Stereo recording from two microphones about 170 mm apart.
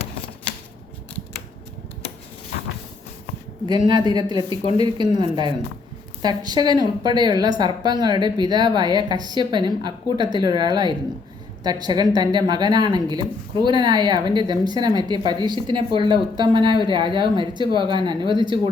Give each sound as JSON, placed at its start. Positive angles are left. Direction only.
{"t": 3.7, "sound": "a woman's voice", "side_deg": -25}